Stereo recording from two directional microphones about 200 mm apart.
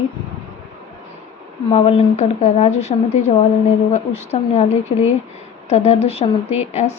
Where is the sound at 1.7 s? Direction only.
30° left (ahead or behind).